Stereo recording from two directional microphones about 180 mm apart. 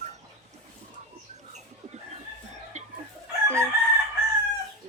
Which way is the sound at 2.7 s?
40° right (ahead or behind).